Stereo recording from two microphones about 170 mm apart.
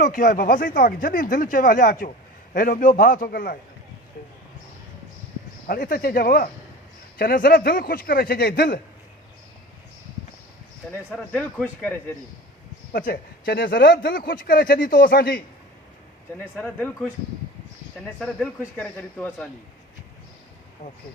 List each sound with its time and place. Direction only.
0.0 s speech: 55° left (ahead or behind)
5.6 s speech: 55° left (ahead or behind)
11.1 s speech: 5° left (ahead or behind)
12.9 s speech: 55° left (ahead or behind)
16.6 s speech: 5° left (ahead or behind)
18.8 s speech: 10° left (ahead or behind)
20.8 s speech: 45° left (ahead or behind)